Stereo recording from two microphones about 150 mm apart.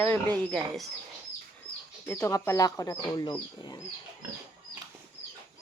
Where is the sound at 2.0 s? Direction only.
20° left (ahead or behind).